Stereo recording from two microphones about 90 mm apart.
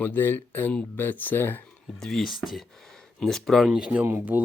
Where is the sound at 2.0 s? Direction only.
5° left (ahead or behind).